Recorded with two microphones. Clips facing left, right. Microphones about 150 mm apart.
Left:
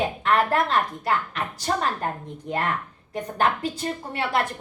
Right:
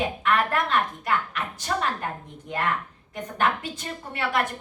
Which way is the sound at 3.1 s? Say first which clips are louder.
Left 2 dB; 35° left (ahead or behind).